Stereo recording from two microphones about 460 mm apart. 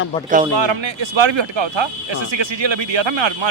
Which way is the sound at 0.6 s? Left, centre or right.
Right.